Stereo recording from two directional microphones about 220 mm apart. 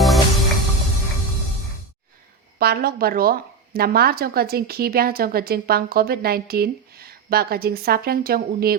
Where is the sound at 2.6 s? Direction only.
45° right (ahead or behind).